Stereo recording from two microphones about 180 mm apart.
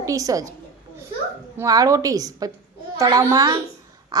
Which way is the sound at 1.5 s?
20° right (ahead or behind).